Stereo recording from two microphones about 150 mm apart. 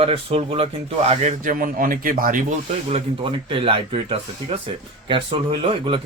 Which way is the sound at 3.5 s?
35° right (ahead or behind).